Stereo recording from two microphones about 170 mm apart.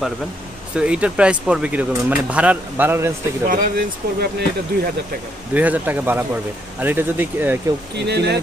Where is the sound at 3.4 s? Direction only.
65° right (ahead or behind).